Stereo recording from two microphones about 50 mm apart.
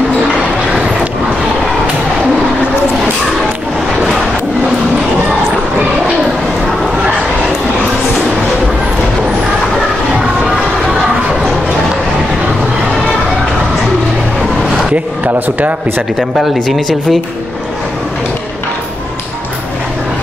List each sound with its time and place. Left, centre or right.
15.2 s a man's voice: right
16.6 s speech: centre